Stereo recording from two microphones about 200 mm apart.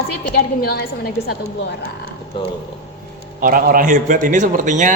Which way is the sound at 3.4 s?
45° right (ahead or behind).